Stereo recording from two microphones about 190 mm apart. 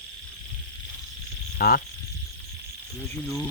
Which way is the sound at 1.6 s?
50° left (ahead or behind).